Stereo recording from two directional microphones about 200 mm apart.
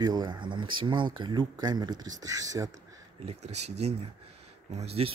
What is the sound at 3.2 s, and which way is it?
Speech, 30° right (ahead or behind).